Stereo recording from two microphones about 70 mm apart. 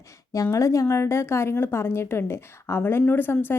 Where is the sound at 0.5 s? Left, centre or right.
Left.